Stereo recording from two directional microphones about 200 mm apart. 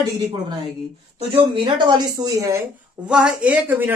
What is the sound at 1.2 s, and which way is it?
Speech, 30° right (ahead or behind).